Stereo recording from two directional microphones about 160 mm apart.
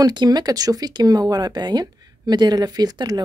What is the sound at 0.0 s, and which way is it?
Speech, 25° right (ahead or behind).